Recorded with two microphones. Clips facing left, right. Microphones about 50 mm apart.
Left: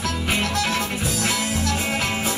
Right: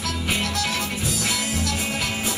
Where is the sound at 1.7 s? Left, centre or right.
Left.